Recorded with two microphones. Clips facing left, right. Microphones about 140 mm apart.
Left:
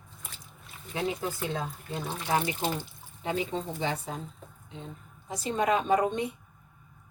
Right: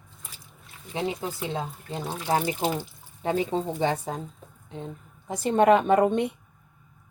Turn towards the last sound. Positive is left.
turn(degrees=-60)  # may be behind; listen again after turning